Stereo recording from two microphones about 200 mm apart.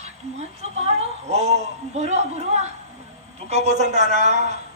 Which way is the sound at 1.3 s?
35° right (ahead or behind).